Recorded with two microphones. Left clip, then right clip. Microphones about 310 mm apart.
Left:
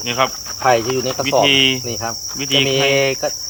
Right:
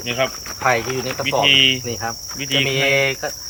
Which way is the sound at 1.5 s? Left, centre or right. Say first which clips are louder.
Right 4 dB; centre.